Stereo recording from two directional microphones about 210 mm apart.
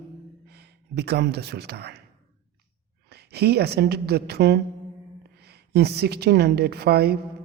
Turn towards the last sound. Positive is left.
turn(degrees=-50)  # may be behind; listen again after turning